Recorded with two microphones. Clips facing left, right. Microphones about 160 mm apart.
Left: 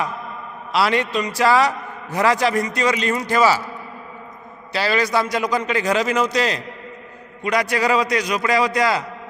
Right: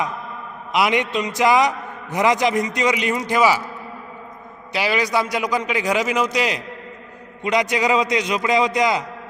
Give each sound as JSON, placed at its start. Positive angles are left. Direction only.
{"t": 0.7, "sound": "a man's voice", "side_deg": -15}
{"t": 4.7, "sound": "a man's voice", "side_deg": -15}